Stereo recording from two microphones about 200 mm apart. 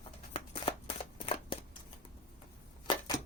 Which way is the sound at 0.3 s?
30° left (ahead or behind).